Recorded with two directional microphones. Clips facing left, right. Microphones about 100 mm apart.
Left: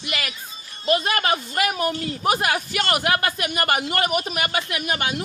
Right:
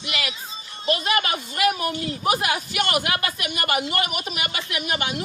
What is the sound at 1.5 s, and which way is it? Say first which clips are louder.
Speech: even; 45° left (ahead or behind).